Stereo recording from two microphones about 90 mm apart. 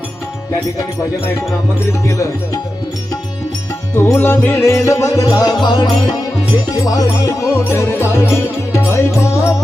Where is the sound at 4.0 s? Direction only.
25° left (ahead or behind).